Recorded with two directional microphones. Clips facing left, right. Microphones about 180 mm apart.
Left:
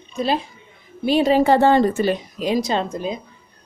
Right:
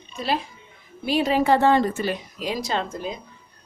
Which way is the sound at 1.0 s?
25° left (ahead or behind).